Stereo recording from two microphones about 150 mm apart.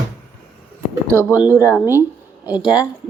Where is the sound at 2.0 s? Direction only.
10° right (ahead or behind).